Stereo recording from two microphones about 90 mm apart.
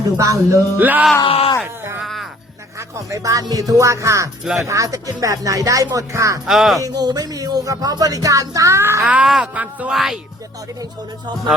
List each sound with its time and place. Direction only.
0.2 s speech: 40° right (ahead or behind)
0.8 s music: 20° right (ahead or behind)
1.2 s speech: 80° left
1.6 s speech: 30° right (ahead or behind)
6.4 s speech: 5° right (ahead or behind)
6.8 s speech: 45° right (ahead or behind)
9.0 s speech: 10° right (ahead or behind)
9.9 s speech: 5° right (ahead or behind)